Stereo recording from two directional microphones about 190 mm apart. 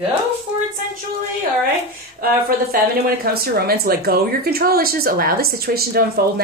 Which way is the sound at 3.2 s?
55° right (ahead or behind).